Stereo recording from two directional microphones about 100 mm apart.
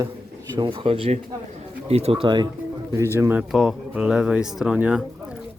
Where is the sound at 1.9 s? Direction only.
85° right.